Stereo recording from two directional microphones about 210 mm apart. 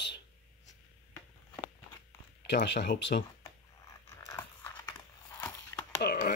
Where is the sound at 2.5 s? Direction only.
55° left (ahead or behind).